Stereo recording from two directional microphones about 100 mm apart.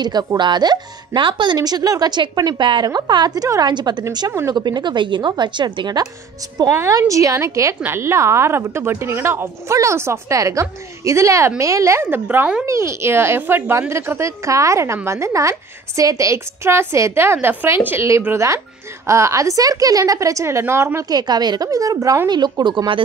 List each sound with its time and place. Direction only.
0.0 s speech: 40° right (ahead or behind)
6.7 s a woman's voice: 30° right (ahead or behind)
12.3 s speech: 15° right (ahead or behind)
12.6 s a woman's voice: 30° right (ahead or behind)
21.1 s a woman's voice: 45° right (ahead or behind)
22.3 s speech: 50° right (ahead or behind)